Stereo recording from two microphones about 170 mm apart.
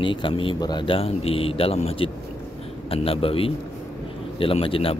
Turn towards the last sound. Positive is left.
turn(degrees=35)  # may be behind; listen again after turning